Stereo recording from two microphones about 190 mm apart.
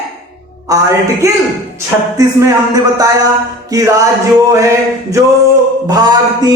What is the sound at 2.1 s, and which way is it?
Speech, 20° right (ahead or behind).